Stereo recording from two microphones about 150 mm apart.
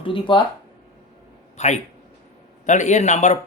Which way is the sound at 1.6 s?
50° left (ahead or behind).